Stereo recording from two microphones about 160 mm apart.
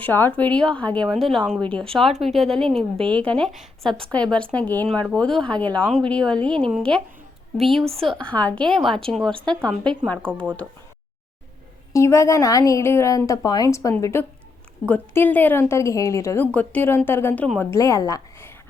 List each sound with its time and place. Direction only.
0.0 s a woman's voice: 15° left (ahead or behind)
11.9 s a woman's voice: 20° left (ahead or behind)